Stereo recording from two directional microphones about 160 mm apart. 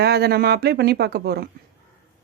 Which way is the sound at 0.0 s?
90° right.